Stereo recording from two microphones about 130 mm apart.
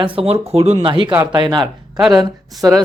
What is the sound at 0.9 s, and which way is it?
Speech, 40° right (ahead or behind).